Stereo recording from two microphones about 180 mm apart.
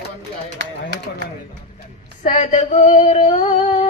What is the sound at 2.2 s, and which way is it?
Female singing, 40° left (ahead or behind).